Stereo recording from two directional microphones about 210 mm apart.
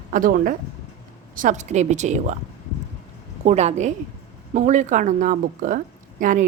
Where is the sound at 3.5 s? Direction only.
30° right (ahead or behind).